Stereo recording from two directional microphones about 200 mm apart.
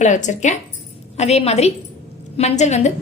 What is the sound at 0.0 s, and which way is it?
A woman's voice, 35° left (ahead or behind).